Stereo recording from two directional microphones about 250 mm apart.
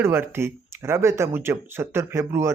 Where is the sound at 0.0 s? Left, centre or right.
Centre.